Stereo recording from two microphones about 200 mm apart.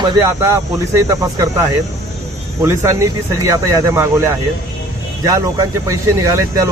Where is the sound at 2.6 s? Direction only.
15° right (ahead or behind).